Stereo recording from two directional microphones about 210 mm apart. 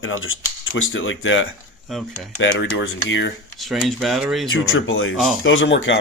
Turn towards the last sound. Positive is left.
turn(degrees=60)  # may be behind; listen again after turning